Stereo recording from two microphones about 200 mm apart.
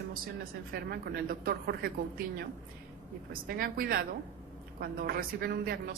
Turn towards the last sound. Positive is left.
turn(degrees=-50)  # may be behind; listen again after turning